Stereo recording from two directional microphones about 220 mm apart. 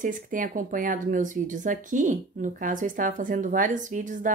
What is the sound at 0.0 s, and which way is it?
Speech, 35° right (ahead or behind).